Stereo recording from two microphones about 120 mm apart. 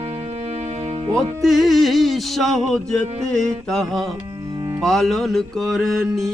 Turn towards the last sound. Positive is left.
turn(degrees=0)  # may be behind; listen again after turning